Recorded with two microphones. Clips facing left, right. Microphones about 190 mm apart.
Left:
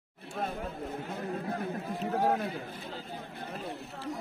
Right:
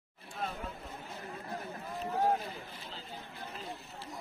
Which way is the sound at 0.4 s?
55° left (ahead or behind).